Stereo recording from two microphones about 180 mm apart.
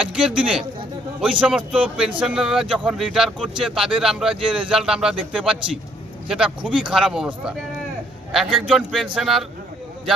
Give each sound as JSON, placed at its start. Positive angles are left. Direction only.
{"t": 0.1, "sound": "speech", "side_deg": -5}